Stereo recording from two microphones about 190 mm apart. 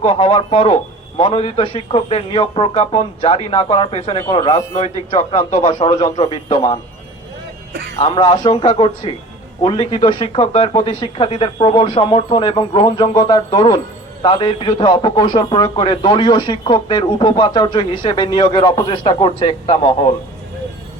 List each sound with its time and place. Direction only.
0.0 s a man's voice: 30° left (ahead or behind)
7.7 s a man's voice: 60° right (ahead or behind)
7.9 s a man's voice: 30° left (ahead or behind)